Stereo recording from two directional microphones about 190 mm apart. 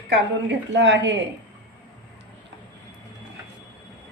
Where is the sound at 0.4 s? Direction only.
70° right (ahead or behind).